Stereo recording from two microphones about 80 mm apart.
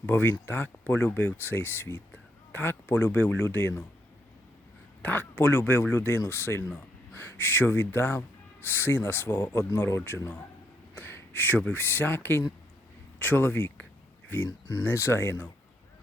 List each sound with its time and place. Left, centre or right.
0.0 s speech: left
5.0 s speech: left
10.9 s a sound: left
11.7 s speech: left